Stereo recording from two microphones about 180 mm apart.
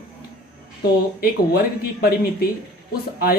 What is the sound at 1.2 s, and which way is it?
Speech, 60° left (ahead or behind).